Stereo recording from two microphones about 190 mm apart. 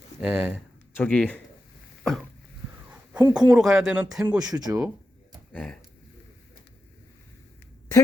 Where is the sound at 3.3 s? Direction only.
5° right (ahead or behind).